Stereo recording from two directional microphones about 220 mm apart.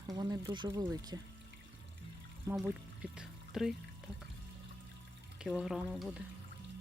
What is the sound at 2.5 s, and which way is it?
Speech, 5° right (ahead or behind).